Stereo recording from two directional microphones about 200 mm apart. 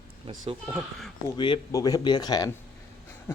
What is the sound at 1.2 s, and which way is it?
Speech, 25° left (ahead or behind).